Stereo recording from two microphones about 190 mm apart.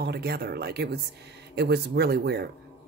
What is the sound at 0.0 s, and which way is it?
Speech, 60° right (ahead or behind).